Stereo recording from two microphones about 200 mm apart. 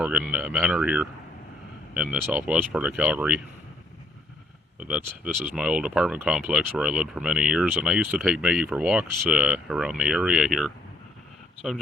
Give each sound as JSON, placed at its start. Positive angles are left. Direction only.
{"t": 0.0, "sound": "speech", "side_deg": -5}
{"t": 4.8, "sound": "speech", "side_deg": -5}